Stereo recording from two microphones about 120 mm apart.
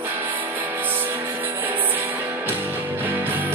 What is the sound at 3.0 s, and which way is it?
Music, 15° right (ahead or behind).